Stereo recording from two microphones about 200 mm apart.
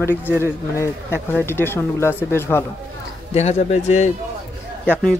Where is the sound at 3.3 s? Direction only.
35° left (ahead or behind).